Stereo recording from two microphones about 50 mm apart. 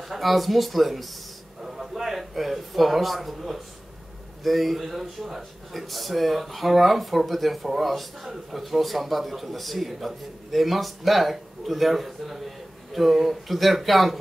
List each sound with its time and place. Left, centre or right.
0.1 s speech: centre